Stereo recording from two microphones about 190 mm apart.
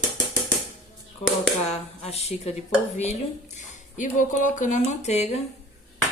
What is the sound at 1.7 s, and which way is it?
Speech, 35° left (ahead or behind).